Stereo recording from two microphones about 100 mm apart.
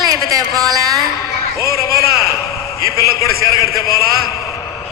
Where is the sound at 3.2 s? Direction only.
35° right (ahead or behind).